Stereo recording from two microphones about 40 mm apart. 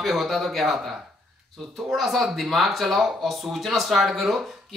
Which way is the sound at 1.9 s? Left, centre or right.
Centre.